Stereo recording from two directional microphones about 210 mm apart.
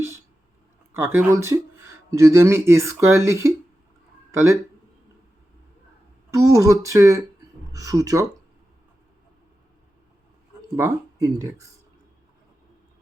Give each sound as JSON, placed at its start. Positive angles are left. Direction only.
{"t": 0.9, "sound": "speech", "side_deg": -10}
{"t": 6.3, "sound": "speech", "side_deg": -15}
{"t": 10.8, "sound": "speech", "side_deg": -15}